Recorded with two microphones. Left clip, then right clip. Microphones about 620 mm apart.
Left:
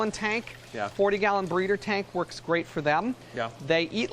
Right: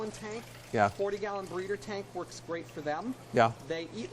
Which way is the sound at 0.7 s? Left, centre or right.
Right.